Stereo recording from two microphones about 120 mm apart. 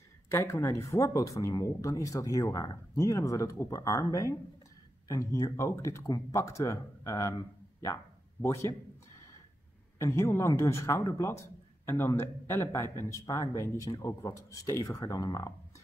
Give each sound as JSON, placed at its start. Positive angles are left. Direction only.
{"t": 0.3, "sound": "speech", "side_deg": 25}
{"t": 9.9, "sound": "speech", "side_deg": 25}